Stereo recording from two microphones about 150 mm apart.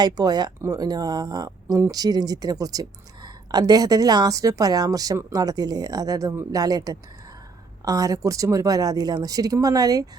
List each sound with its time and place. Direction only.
0.0 s speech: 25° right (ahead or behind)